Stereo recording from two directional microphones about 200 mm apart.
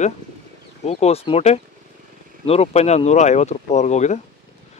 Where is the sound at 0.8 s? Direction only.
30° left (ahead or behind).